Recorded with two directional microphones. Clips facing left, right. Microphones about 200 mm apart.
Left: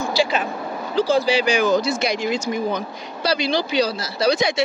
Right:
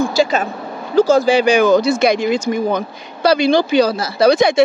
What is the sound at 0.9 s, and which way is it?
Speech, 45° right (ahead or behind).